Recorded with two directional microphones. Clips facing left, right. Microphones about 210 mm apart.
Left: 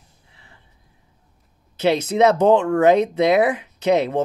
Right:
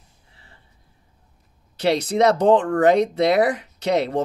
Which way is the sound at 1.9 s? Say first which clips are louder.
Left 1 dB; 35° right (ahead or behind).